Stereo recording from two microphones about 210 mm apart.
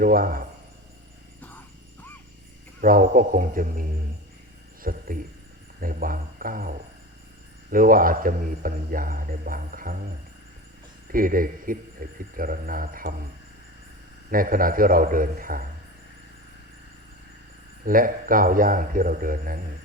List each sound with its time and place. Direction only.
0.0 s speech: 45° right (ahead or behind)
2.8 s a man's voice: 40° right (ahead or behind)
11.1 s a man's voice: 40° right (ahead or behind)
14.3 s a man's voice: 40° right (ahead or behind)
17.8 s a man's voice: 40° right (ahead or behind)